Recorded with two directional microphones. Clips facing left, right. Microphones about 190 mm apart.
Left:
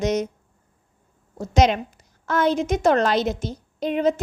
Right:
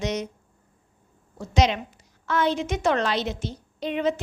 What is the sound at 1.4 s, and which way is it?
A woman's voice, 45° left (ahead or behind).